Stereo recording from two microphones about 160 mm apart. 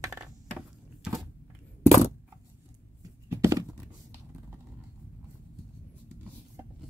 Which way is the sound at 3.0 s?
15° right (ahead or behind).